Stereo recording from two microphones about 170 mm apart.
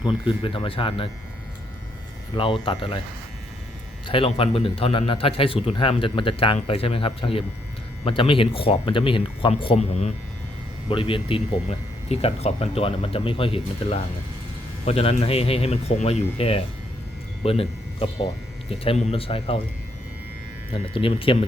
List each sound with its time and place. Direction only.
0.0 s a man's voice: 30° left (ahead or behind)
2.3 s a man's voice: 30° left (ahead or behind)
4.0 s a man's voice: 30° left (ahead or behind)
20.7 s a man's voice: 30° left (ahead or behind)